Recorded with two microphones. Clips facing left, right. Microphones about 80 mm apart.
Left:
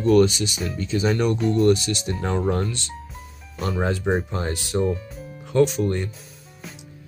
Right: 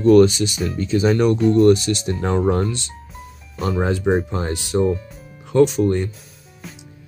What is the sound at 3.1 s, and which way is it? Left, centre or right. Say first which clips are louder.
Speech: right 3 dB; centre.